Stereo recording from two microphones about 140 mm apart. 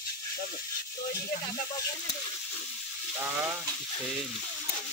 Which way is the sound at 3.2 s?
10° right (ahead or behind).